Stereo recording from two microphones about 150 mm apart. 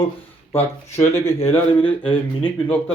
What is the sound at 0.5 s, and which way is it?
Speech, 15° left (ahead or behind).